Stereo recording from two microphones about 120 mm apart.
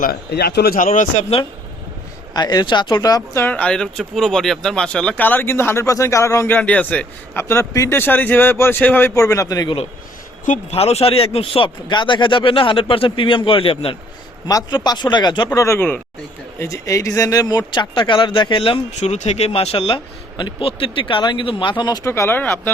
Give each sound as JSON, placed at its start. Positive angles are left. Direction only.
{"t": 0.8, "sound": "speech", "side_deg": 90}
{"t": 2.3, "sound": "speech", "side_deg": 35}
{"t": 3.4, "sound": "speech", "side_deg": 10}
{"t": 7.4, "sound": "speech", "side_deg": 25}
{"t": 10.4, "sound": "speech", "side_deg": 75}
{"t": 14.4, "sound": "speech", "side_deg": 35}
{"t": 15.5, "sound": "speech", "side_deg": 25}
{"t": 22.1, "sound": "speech", "side_deg": 20}